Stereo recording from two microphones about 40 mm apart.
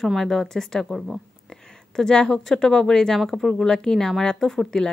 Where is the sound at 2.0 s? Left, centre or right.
Left.